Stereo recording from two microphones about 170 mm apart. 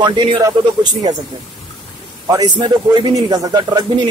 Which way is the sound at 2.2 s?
25° right (ahead or behind).